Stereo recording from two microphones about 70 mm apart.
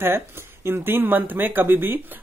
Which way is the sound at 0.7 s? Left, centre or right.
Right.